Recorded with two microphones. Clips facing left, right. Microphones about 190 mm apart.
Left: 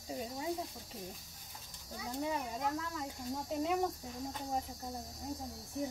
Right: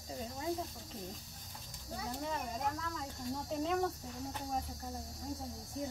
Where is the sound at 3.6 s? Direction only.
15° left (ahead or behind).